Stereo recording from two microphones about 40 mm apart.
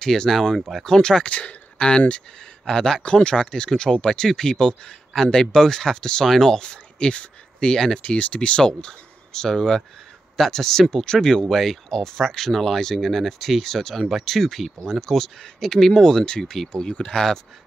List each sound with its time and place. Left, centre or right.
0.0 s speech: centre
1.3 s speech: left; by 8.0 s centre
8.0 s speech: left
11.4 s speech: centre